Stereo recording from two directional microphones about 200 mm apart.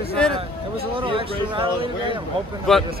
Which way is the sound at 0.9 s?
25° right (ahead or behind).